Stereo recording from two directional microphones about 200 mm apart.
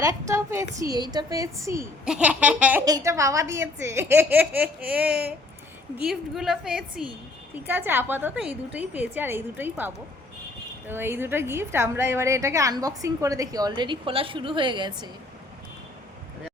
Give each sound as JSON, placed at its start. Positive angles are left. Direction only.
{"t": 0.0, "sound": "a woman's voice", "side_deg": -15}
{"t": 2.8, "sound": "a woman's voice", "side_deg": -15}